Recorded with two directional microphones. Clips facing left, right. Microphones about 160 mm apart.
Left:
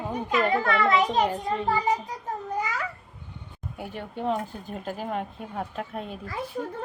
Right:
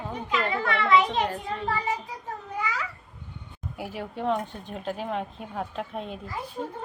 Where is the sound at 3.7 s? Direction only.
5° right (ahead or behind).